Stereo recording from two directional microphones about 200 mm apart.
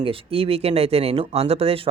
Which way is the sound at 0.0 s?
25° right (ahead or behind).